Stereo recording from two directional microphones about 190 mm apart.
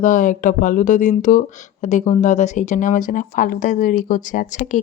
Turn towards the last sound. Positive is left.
turn(degrees=40)  # may be behind; listen again after turning